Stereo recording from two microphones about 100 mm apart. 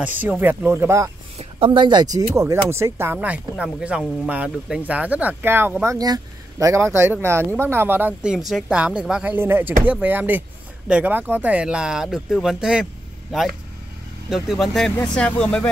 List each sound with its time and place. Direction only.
0.0 s speech: 15° right (ahead or behind)
1.4 s speech: 65° right (ahead or behind); by 2.2 s 45° right (ahead or behind)
2.3 s speech: 25° right (ahead or behind)
5.9 s speech: 40° right (ahead or behind); by 8.1 s 20° right (ahead or behind)
8.2 s speech: 5° right (ahead or behind)
9.2 s speech: 20° right (ahead or behind); by 12.8 s 5° right (ahead or behind)
14.3 s speech: centre (ahead or behind)